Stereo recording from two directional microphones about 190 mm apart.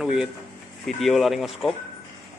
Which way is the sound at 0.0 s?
5° right (ahead or behind).